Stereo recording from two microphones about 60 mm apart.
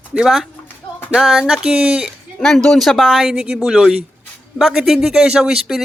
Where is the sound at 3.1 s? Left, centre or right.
Centre.